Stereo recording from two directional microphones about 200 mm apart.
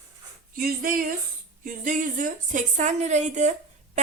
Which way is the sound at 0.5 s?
45° right (ahead or behind).